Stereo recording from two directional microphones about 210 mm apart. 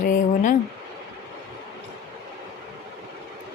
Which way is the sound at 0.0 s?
40° left (ahead or behind).